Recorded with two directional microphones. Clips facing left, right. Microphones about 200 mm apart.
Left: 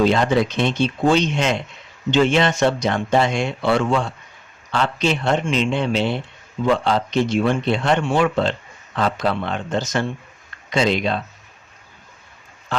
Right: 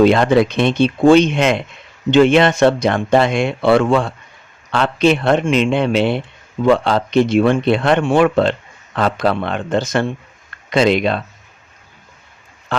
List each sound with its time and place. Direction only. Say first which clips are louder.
0.0 s speech: right 5 dB; 60° right (ahead or behind)